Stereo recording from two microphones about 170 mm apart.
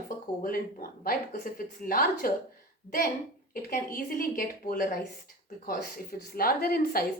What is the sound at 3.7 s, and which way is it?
Speech, 55° left (ahead or behind).